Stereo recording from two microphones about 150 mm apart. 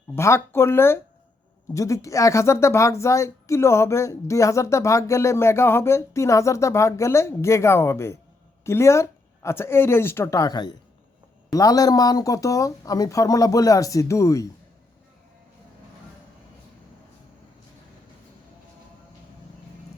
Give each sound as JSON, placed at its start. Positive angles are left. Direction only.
{"t": 0.2, "sound": "speech", "side_deg": 20}